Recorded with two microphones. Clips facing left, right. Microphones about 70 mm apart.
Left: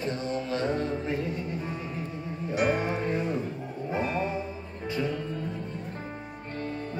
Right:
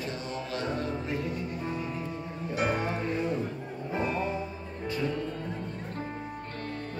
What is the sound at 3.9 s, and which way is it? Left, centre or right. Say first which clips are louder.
Music: left 1 dB; centre.